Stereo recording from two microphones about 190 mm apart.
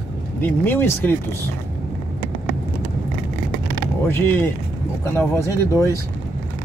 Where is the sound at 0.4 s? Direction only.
10° left (ahead or behind).